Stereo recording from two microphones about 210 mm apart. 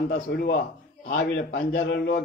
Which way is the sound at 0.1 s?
50° left (ahead or behind).